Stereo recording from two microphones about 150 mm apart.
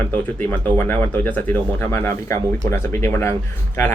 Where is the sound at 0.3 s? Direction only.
10° left (ahead or behind).